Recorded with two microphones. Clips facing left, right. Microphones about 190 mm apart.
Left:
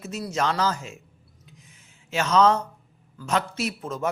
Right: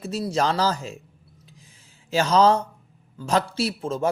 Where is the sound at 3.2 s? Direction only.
35° right (ahead or behind).